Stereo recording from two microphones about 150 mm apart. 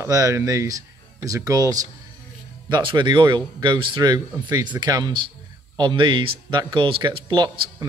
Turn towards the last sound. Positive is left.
turn(degrees=-30)  # may be behind; listen again after turning